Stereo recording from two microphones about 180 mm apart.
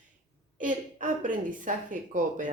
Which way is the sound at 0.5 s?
45° right (ahead or behind).